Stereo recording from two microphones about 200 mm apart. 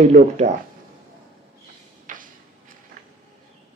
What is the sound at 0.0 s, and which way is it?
Speech, 35° right (ahead or behind).